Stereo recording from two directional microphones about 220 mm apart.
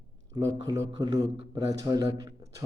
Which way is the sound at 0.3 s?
20° right (ahead or behind).